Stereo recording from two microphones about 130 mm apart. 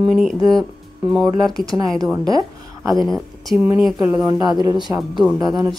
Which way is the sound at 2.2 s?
25° right (ahead or behind).